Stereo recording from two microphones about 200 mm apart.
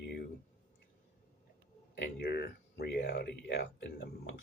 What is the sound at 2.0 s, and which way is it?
Speech, 55° left (ahead or behind).